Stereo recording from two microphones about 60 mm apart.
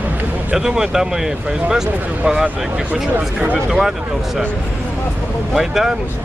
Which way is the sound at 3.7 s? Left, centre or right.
Centre.